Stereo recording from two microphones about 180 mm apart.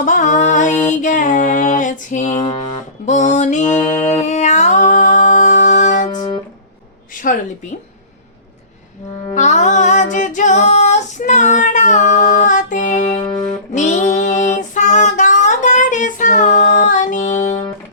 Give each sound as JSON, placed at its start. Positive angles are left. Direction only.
{"t": 0.0, "sound": "music", "side_deg": 45}
{"t": 0.9, "sound": "female singing", "side_deg": 45}
{"t": 2.4, "sound": "music", "side_deg": 30}
{"t": 6.1, "sound": "music", "side_deg": 20}
{"t": 9.3, "sound": "music", "side_deg": 40}
{"t": 13.7, "sound": "female singing", "side_deg": 40}